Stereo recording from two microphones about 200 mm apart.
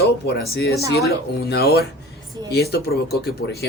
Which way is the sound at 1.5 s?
50° left (ahead or behind).